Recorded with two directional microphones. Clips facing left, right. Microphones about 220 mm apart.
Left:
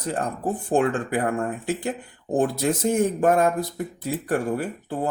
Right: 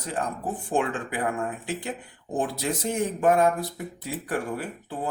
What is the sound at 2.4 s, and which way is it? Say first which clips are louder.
Speech: left 6 dB; 45° left (ahead or behind).